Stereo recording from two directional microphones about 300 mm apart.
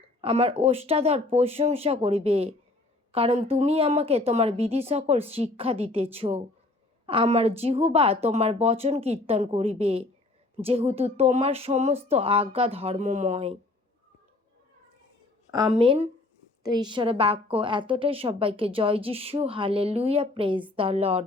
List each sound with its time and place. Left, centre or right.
0.2 s speech: centre
15.5 s a woman's voice: centre